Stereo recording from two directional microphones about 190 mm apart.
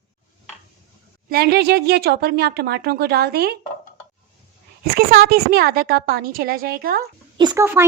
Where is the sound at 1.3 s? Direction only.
55° right (ahead or behind).